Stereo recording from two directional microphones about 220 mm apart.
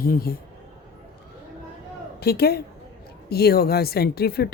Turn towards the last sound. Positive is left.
turn(degrees=45)  # may be behind; listen again after turning